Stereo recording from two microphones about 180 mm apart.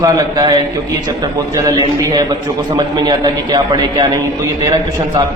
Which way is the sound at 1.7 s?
20° right (ahead or behind).